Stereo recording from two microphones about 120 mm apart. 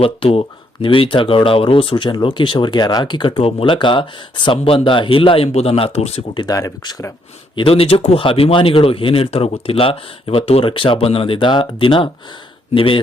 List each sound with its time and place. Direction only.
0.0 s speech: 55° left (ahead or behind)
6.3 s speech: 35° left (ahead or behind)
7.5 s speech: 50° left (ahead or behind)